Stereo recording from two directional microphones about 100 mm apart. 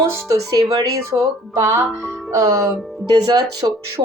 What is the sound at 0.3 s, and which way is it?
Speech, 40° right (ahead or behind).